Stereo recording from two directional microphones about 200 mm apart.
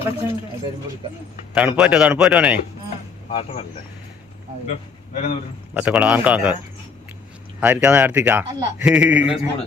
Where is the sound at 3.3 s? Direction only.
30° left (ahead or behind).